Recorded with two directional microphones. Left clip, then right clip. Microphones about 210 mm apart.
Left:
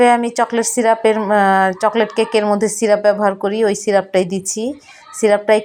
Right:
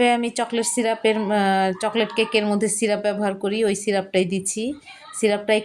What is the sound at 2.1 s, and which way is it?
Speech, 30° left (ahead or behind).